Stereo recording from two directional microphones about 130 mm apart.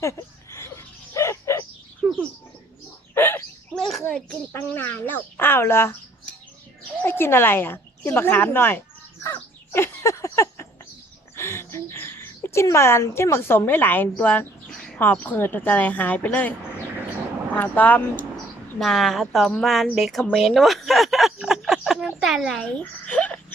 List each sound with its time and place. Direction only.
0.0 s a sound: 20° left (ahead or behind)
1.1 s chicken: 20° left (ahead or behind)
3.2 s bird: 15° left (ahead or behind)
3.8 s bird: centre (ahead or behind)
4.0 s speech: 10° left (ahead or behind)
7.0 s a woman's voice: 20° left (ahead or behind)
9.2 s a sound: 20° left (ahead or behind)
14.2 s speech: 15° left (ahead or behind)
18.8 s speech: centre (ahead or behind)
20.3 s a sound: centre (ahead or behind)